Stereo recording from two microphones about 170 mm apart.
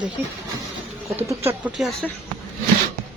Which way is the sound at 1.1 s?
15° right (ahead or behind).